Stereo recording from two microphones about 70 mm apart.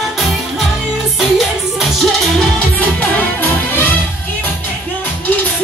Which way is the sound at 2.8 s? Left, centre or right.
Left.